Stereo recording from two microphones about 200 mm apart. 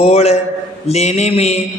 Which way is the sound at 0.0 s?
30° left (ahead or behind).